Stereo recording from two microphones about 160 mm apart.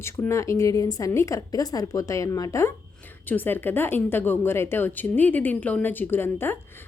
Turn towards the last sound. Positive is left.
turn(degrees=15)  # may be behind; listen again after turning